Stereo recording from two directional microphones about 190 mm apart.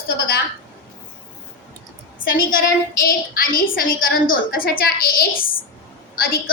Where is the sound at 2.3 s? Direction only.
50° left (ahead or behind).